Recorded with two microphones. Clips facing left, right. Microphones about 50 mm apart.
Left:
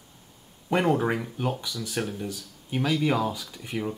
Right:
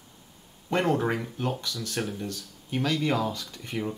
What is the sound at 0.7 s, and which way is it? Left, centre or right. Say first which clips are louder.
Speech: left 2 dB; centre.